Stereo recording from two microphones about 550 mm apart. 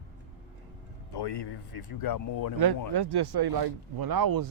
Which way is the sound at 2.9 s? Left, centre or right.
Right.